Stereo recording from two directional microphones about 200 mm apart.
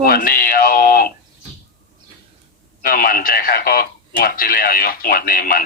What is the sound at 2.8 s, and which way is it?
Speech, 45° left (ahead or behind).